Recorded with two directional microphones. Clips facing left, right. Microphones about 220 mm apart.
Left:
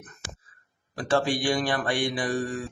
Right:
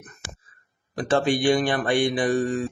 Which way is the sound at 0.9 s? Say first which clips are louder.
Right 3 dB; 20° right (ahead or behind).